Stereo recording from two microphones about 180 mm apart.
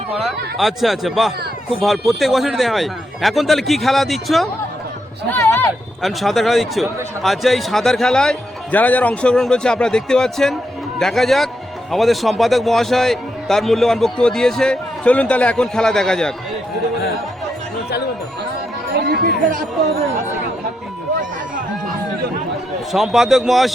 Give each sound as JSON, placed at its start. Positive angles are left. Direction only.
{"t": 0.2, "sound": "a man's voice", "side_deg": 0}
{"t": 5.3, "sound": "speech", "side_deg": 10}
{"t": 6.0, "sound": "a man's voice", "side_deg": 0}
{"t": 19.0, "sound": "chatter", "side_deg": -55}
{"t": 22.9, "sound": "a man's voice", "side_deg": 0}